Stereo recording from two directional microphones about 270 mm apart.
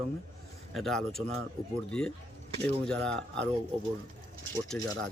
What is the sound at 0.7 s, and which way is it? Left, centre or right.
Speech, centre.